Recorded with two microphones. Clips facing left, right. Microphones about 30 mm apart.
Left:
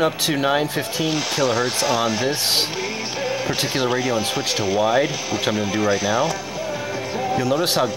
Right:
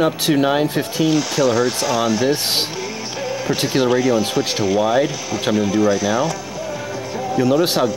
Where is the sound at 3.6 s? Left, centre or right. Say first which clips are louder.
Right 7 dB; centre.